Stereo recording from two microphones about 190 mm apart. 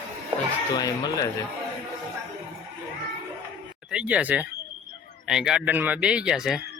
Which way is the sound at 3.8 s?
5° right (ahead or behind).